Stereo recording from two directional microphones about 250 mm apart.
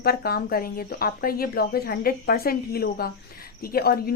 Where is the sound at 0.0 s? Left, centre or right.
Left.